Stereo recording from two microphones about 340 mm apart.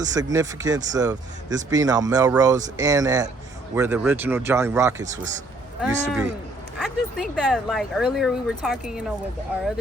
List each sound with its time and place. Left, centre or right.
0.0 s speech: centre